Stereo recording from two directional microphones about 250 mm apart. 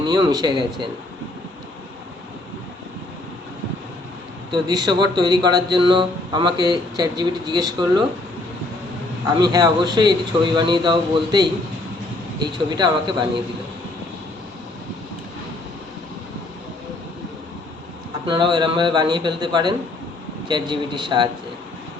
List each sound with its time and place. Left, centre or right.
0.0 s speech: centre
4.5 s speech: centre
9.4 s speech: centre
18.3 s speech: centre